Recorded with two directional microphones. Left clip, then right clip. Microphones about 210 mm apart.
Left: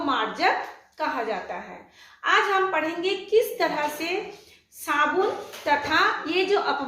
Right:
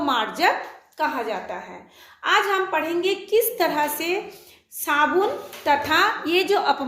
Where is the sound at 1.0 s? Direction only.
45° right (ahead or behind).